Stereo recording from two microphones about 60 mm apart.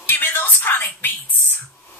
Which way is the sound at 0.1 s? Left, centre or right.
Left.